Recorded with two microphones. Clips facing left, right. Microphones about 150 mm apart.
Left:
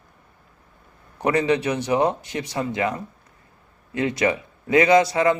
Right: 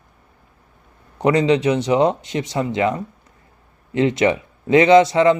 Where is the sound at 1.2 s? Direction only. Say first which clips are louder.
Right 4 dB; 20° right (ahead or behind).